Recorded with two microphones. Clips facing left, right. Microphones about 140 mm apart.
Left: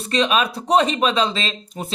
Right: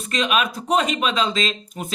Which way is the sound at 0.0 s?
30° left (ahead or behind).